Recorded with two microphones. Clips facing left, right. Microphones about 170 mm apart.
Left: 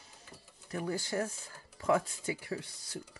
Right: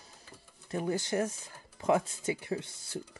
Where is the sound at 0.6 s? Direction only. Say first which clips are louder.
Right 4 dB; 25° right (ahead or behind).